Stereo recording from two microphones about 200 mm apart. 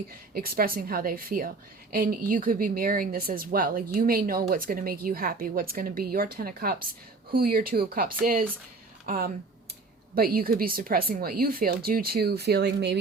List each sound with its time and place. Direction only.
0.1 s a woman's voice: 45° right (ahead or behind)